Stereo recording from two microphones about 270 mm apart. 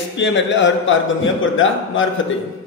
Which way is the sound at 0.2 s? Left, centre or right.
Left.